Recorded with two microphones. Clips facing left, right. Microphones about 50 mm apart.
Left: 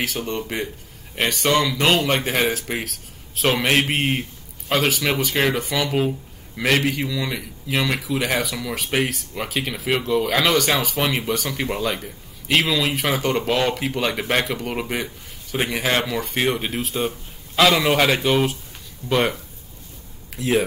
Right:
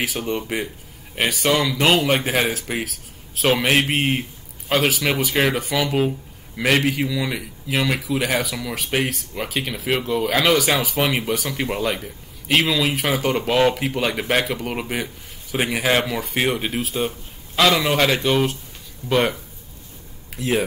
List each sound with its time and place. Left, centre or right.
0.0 s speech: centre
20.3 s speech: centre